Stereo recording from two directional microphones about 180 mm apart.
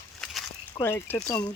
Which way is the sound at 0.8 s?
10° left (ahead or behind).